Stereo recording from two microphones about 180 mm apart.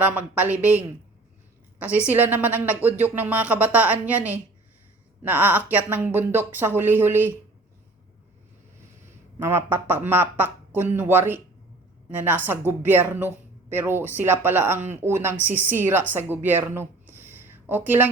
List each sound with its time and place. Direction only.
0.0 s speech: 10° right (ahead or behind)
2.0 s speech: 10° right (ahead or behind)
9.4 s speech: 15° right (ahead or behind)